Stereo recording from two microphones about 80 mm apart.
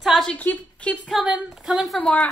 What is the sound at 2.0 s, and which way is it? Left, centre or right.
Speech, centre.